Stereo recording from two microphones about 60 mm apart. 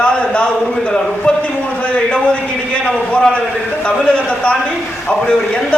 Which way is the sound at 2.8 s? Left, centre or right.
Centre.